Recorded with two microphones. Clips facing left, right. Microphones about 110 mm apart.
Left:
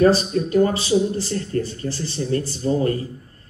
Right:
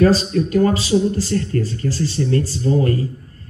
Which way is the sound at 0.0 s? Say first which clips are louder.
Right 1 dB; 25° left (ahead or behind).